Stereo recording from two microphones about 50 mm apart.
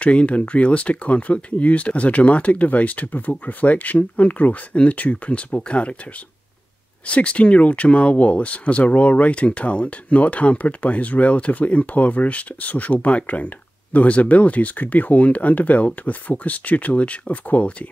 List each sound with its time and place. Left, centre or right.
0.0 s speech: left
7.1 s speech: left